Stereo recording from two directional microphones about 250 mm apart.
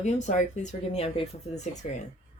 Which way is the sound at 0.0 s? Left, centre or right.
Left.